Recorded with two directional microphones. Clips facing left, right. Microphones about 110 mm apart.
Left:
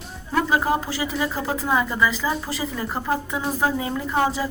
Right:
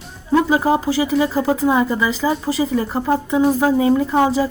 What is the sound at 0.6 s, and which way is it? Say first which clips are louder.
A woman's voice: right 6 dB; 25° right (ahead or behind).